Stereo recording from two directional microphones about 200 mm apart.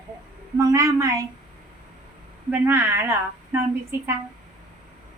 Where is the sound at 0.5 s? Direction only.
15° right (ahead or behind).